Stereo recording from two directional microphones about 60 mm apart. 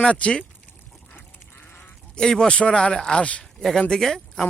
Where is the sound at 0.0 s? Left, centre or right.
Centre.